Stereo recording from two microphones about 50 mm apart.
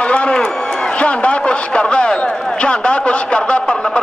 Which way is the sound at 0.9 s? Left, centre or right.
Left.